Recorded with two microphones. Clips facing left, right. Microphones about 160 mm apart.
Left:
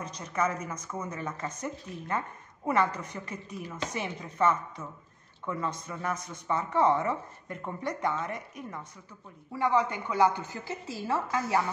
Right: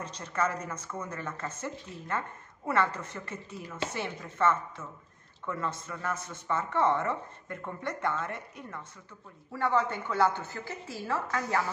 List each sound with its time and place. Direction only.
0.2 s a woman's voice: 10° left (ahead or behind)